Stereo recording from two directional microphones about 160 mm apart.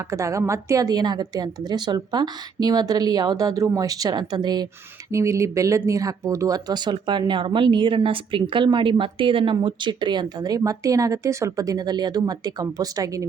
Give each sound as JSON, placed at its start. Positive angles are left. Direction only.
{"t": 0.1, "sound": "speech", "side_deg": -20}